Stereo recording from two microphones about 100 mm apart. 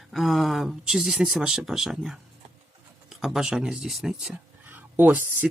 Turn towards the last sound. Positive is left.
turn(degrees=-20)  # may be behind; listen again after turning